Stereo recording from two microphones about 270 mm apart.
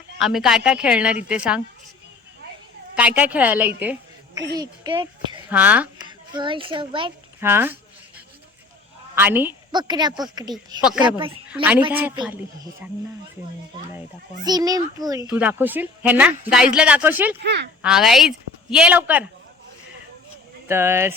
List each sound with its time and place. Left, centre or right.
0.2 s a woman's voice: centre
2.9 s a woman's voice: centre
6.1 s a child's voice: centre
7.4 s a sound: centre
9.1 s a woman's voice: centre
10.5 s a woman's voice: centre
11.0 s speech: centre
11.4 s a woman's voice: centre
14.4 s a child's voice: centre
17.4 s speech: right
17.8 s a woman's voice: centre
20.7 s a child's voice: centre